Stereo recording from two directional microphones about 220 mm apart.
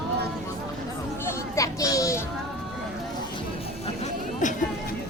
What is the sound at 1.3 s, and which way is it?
Music, 15° left (ahead or behind).